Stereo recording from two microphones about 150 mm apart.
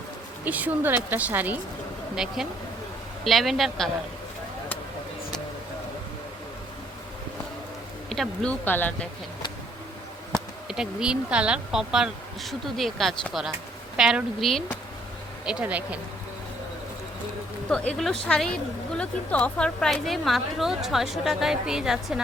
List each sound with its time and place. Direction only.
0.4 s speech: 10° right (ahead or behind)
8.1 s speech: 5° left (ahead or behind)
10.3 s a sound: 20° right (ahead or behind)
10.7 s speech: 5° right (ahead or behind)
17.7 s speech: 5° left (ahead or behind)